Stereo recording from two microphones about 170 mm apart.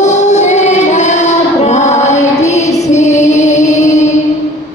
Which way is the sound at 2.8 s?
40° left (ahead or behind).